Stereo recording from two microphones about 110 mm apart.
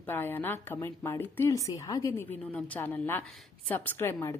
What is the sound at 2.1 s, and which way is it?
A woman's voice, 20° left (ahead or behind).